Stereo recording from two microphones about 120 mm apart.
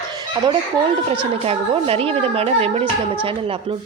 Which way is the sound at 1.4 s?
55° right (ahead or behind).